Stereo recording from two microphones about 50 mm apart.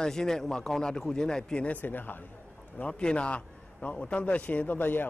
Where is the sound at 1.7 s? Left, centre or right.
Left.